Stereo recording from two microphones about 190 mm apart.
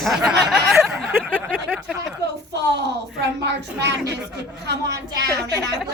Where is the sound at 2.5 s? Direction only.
65° right (ahead or behind).